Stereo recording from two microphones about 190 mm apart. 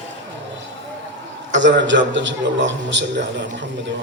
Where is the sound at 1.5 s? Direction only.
75° right (ahead or behind).